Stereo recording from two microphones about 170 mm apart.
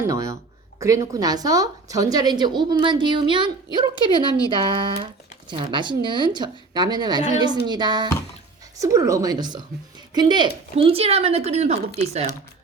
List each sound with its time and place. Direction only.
0.0 s a woman's voice: 20° right (ahead or behind); by 12.4 s 40° right (ahead or behind)